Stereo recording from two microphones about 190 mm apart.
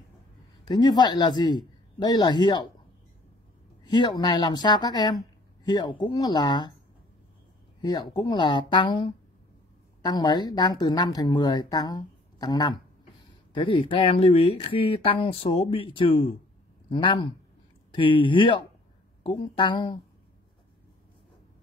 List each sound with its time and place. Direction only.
0.7 s a woman's voice: 20° left (ahead or behind)
3.8 s a woman's voice: 25° left (ahead or behind)
7.8 s a woman's voice: 20° left (ahead or behind)